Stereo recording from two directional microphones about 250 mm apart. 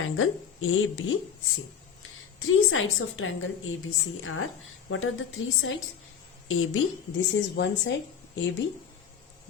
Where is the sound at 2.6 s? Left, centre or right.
Left.